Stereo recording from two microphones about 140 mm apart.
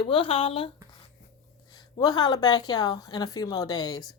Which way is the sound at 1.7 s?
30° left (ahead or behind).